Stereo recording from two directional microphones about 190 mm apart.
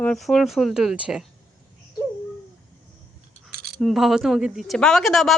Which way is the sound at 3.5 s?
55° right (ahead or behind).